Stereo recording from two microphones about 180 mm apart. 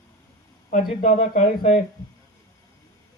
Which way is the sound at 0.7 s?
50° left (ahead or behind).